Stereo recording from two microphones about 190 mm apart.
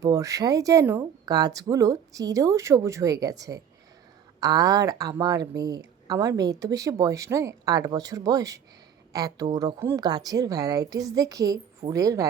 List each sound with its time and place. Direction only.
0.0 s a woman's voice: 20° right (ahead or behind)